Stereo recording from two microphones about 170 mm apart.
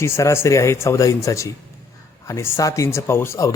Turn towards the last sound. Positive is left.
turn(degrees=15)  # may be behind; listen again after turning